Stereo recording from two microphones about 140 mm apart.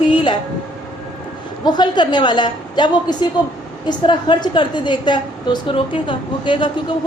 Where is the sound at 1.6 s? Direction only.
30° left (ahead or behind).